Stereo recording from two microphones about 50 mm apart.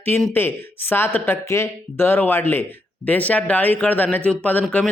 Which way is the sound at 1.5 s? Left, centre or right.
Left.